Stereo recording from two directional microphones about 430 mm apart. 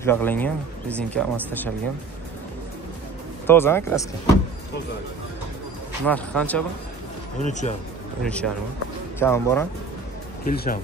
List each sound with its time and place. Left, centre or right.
0.0 s speech: centre
3.4 s speech: centre
6.0 s speech: centre
7.3 s speech: centre
8.2 s speech: centre
10.4 s speech: centre